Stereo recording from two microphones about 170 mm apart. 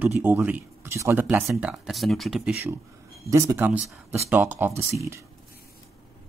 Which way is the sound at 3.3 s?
15° right (ahead or behind).